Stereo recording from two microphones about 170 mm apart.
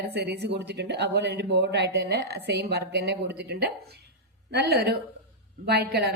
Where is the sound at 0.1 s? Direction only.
80° right.